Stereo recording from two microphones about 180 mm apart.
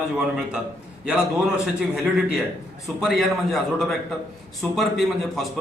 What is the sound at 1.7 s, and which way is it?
A man's voice, centre (ahead or behind).